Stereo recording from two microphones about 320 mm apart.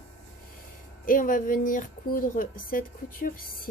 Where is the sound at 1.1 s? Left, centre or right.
Left.